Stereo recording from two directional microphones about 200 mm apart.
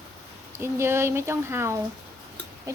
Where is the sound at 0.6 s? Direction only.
10° right (ahead or behind).